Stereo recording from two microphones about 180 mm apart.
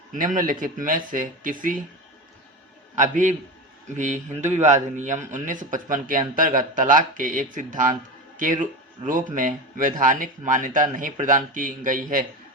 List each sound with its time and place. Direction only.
0.1 s a man's voice: 45° right (ahead or behind)
2.9 s a man's voice: 45° right (ahead or behind)